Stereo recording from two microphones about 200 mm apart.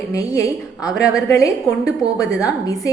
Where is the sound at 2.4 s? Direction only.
15° left (ahead or behind).